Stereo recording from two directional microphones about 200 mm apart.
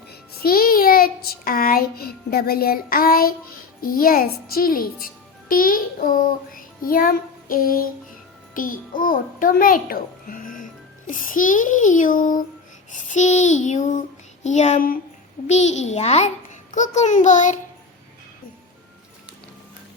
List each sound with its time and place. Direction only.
0.1 s music: 50° left (ahead or behind)
5.5 s child singing: 45° left (ahead or behind)
8.5 s a child's voice: 45° left (ahead or behind)